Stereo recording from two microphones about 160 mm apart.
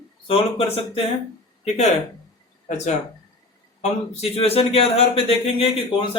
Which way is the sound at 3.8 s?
40° left (ahead or behind).